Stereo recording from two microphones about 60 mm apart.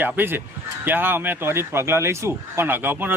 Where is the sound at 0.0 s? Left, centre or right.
Right.